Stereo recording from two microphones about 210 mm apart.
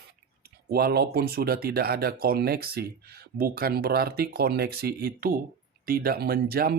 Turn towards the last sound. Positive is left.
turn(degrees=-45)  # may be behind; listen again after turning